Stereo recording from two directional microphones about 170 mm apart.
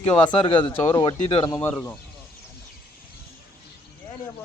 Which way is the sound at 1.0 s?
30° left (ahead or behind).